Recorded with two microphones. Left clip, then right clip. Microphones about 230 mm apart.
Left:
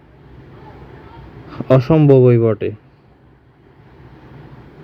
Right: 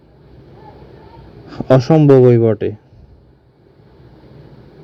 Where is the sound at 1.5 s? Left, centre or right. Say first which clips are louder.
Right 2 dB; right.